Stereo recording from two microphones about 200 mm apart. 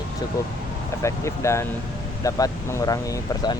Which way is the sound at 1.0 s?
15° left (ahead or behind).